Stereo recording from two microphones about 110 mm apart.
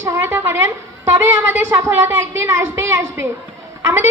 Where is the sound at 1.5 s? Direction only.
25° right (ahead or behind).